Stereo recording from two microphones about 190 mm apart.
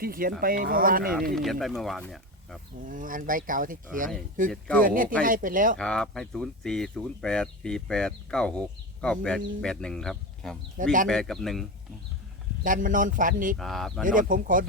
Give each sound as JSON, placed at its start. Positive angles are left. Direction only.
{"t": 0.0, "sound": "speech", "side_deg": -50}
{"t": 1.4, "sound": "speech", "side_deg": 0}
{"t": 2.8, "sound": "speech", "side_deg": -45}
{"t": 5.7, "sound": "speech", "side_deg": 5}
{"t": 12.6, "sound": "speech", "side_deg": -45}
{"t": 13.6, "sound": "speech", "side_deg": 0}
{"t": 14.0, "sound": "speech", "side_deg": -45}